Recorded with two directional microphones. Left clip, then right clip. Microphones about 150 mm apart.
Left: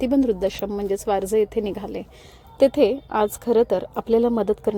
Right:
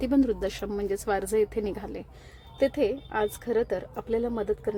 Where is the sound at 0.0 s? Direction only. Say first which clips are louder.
Left 5 dB; 25° left (ahead or behind).